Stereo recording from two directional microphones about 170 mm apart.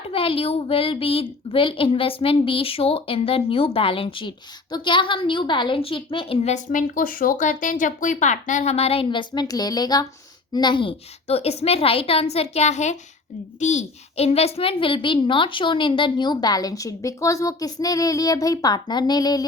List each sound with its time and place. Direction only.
0.1 s a woman's voice: 35° left (ahead or behind)